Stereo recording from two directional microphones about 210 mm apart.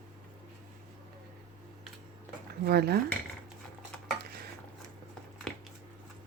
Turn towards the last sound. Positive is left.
turn(degrees=0)  # may be behind; listen again after turning